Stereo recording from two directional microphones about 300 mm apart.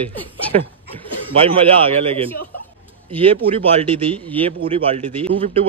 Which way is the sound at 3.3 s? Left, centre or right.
Centre.